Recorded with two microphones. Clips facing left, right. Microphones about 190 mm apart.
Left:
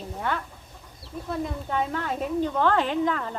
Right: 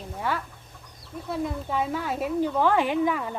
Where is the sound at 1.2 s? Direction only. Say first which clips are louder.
Right 1 dB; 5° right (ahead or behind).